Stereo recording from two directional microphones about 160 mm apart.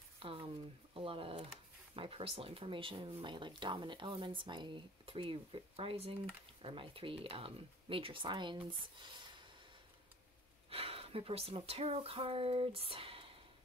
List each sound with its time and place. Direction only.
0.2 s a sound: 35° right (ahead or behind)
0.9 s speech: 35° right (ahead or behind)
10.7 s speech: 35° right (ahead or behind)